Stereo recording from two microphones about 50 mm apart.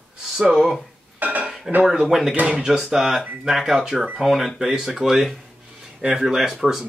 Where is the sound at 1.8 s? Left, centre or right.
Centre.